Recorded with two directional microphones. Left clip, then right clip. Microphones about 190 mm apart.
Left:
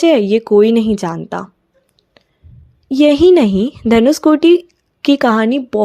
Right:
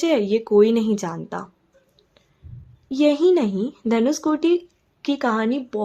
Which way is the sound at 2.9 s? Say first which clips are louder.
Left 8 dB; 35° left (ahead or behind).